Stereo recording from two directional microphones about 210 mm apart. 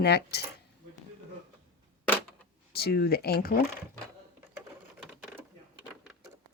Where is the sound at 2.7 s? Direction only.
50° left (ahead or behind).